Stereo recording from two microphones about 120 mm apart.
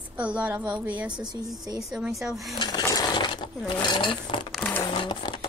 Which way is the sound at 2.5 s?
35° left (ahead or behind).